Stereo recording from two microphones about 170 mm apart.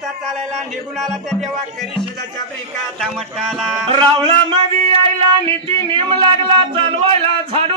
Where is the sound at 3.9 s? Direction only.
30° right (ahead or behind).